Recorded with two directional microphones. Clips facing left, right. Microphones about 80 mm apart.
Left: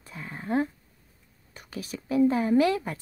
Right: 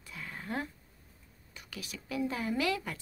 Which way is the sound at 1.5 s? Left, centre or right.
Left.